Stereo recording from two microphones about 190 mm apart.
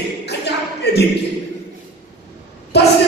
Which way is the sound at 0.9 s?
60° left (ahead or behind).